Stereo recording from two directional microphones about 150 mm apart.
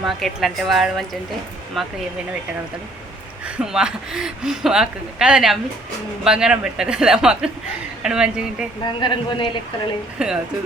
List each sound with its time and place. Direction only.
0.0 s speech: centre (ahead or behind)
3.4 s speech: 5° right (ahead or behind)
9.0 s speech: 30° left (ahead or behind)
10.2 s speech: 5° right (ahead or behind)